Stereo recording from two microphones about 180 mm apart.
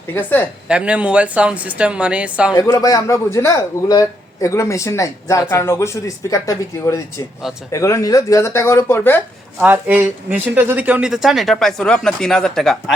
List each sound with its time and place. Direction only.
0.1 s a man's voice: 10° left (ahead or behind)
0.7 s speech: 5° right (ahead or behind)
2.6 s a man's voice: 20° left (ahead or behind)
9.6 s speech: 10° right (ahead or behind)